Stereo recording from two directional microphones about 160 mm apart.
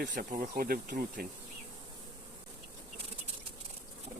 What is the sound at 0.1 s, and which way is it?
Speech, 55° right (ahead or behind).